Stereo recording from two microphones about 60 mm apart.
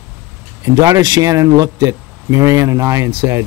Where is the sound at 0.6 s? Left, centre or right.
Right.